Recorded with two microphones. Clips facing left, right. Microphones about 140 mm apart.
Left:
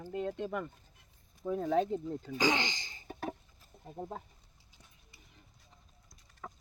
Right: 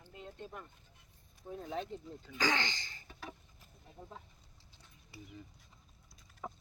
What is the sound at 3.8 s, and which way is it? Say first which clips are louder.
Speech: left 10 dB; 50° left (ahead or behind).